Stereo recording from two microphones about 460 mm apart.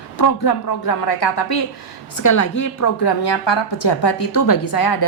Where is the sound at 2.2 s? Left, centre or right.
Left.